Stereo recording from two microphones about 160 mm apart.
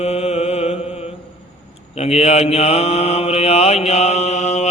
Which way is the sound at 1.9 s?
40° left (ahead or behind).